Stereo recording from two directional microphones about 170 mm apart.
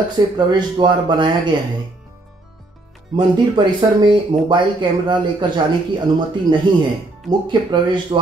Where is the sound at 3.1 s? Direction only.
30° right (ahead or behind).